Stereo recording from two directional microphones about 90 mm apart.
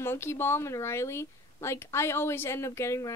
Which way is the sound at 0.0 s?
25° left (ahead or behind).